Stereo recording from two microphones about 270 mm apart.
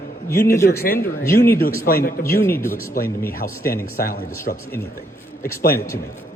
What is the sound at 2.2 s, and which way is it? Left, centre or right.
Speech, centre.